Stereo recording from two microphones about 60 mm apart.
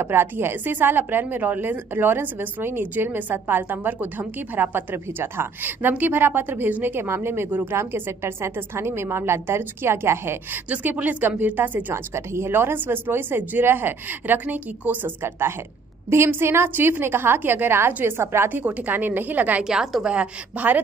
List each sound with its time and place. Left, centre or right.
0.0 s a woman's voice: right
10.5 s a woman's voice: right
11.9 s a woman's voice: right
15.2 s a woman's voice: right
18.5 s a woman's voice: right
19.6 s a woman's voice: centre; by 20.8 s right